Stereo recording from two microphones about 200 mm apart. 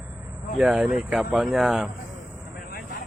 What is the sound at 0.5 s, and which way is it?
Speech, centre (ahead or behind).